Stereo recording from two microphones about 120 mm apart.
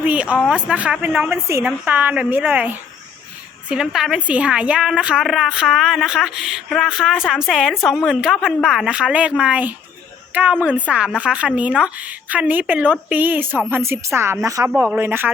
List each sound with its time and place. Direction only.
0.0 s a woman's voice: 10° right (ahead or behind)
1.5 s a woman's voice: 20° right (ahead or behind)
3.7 s a woman's voice: 5° right (ahead or behind)